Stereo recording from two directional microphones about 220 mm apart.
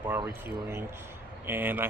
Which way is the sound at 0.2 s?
10° right (ahead or behind).